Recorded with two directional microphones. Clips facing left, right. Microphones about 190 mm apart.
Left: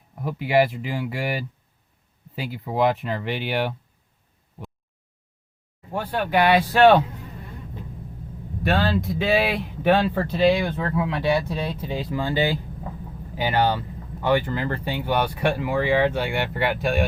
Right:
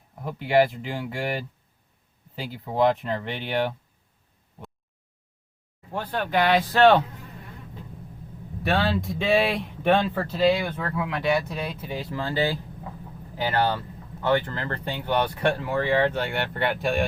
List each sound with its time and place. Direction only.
0.3 s speech: 5° left (ahead or behind)
5.9 s speech: 10° left (ahead or behind)
8.7 s speech: centre (ahead or behind)
10.2 s speech: 20° left (ahead or behind)
12.1 s speech: 15° left (ahead or behind)